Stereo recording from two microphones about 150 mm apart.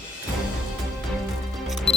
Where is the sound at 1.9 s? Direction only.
5° left (ahead or behind).